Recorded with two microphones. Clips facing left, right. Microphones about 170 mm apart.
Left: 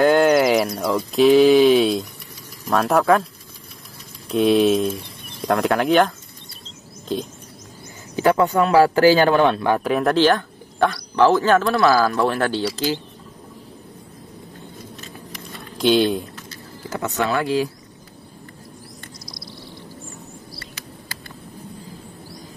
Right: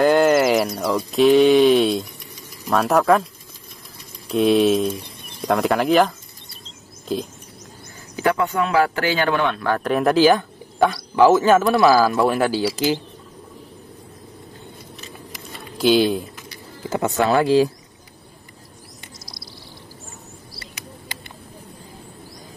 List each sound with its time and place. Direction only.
0.0 s speech: centre (ahead or behind)
4.3 s speech: centre (ahead or behind)
8.2 s speech: 30° left (ahead or behind)
9.8 s speech: centre (ahead or behind)
15.5 s a sound: 5° right (ahead or behind)
16.9 s speech: 30° right (ahead or behind)
19.2 s bird: centre (ahead or behind)